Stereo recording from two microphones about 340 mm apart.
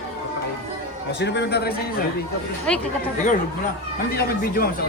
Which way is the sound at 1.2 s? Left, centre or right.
Left.